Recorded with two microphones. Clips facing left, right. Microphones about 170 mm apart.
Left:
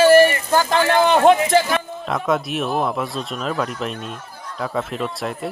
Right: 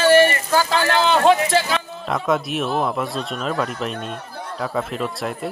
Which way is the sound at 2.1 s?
Centre (ahead or behind).